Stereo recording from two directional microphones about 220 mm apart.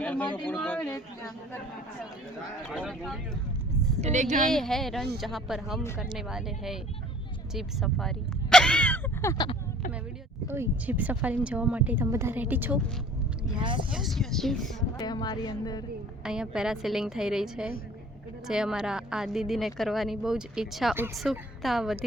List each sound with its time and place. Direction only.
0.0 s speech: 5° left (ahead or behind)
2.6 s a woman's voice: centre (ahead or behind)
4.0 s speech: 30° right (ahead or behind)
4.5 s a woman's voice: centre (ahead or behind); by 9.6 s 15° left (ahead or behind)
10.5 s a woman's voice: 10° right (ahead or behind)
13.6 s speech: 20° right (ahead or behind)
13.9 s a woman's voice: centre (ahead or behind)
14.9 s speech: 20° left (ahead or behind)
16.2 s a woman's voice: 5° right (ahead or behind)